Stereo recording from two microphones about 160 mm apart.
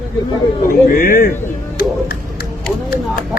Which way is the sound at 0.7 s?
65° left (ahead or behind).